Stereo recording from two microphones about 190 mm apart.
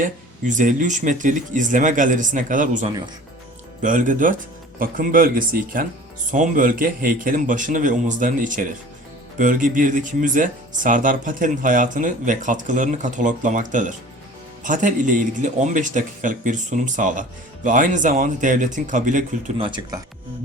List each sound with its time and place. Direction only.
0.0 s speech: 45° right (ahead or behind)
19.5 s speech: 25° right (ahead or behind)